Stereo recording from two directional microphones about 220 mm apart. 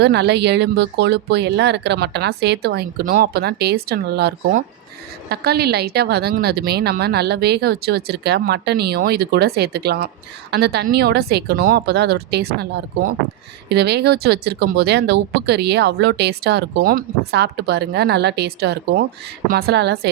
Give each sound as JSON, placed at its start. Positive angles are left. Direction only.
{"t": 0.0, "sound": "speech", "side_deg": -50}